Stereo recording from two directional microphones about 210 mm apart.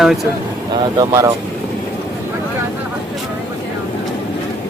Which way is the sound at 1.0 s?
15° right (ahead or behind).